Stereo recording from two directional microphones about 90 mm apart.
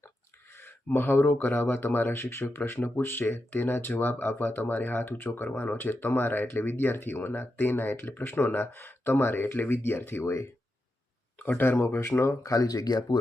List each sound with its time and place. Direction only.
0.5 s speech: 25° left (ahead or behind); by 13.1 s 45° left (ahead or behind)